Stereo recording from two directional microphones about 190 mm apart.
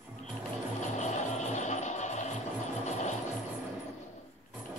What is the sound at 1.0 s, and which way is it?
Music, 40° left (ahead or behind).